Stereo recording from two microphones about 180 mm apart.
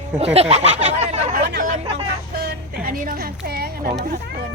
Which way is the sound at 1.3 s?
50° right (ahead or behind).